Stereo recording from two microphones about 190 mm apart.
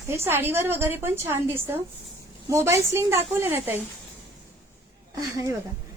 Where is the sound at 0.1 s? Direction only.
10° right (ahead or behind).